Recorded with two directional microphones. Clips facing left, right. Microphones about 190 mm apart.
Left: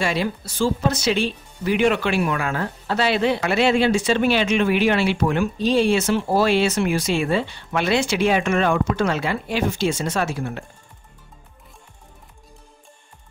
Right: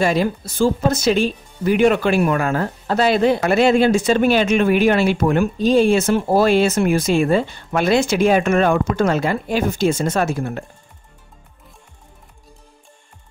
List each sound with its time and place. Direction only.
0.0 s speech: 45° right (ahead or behind)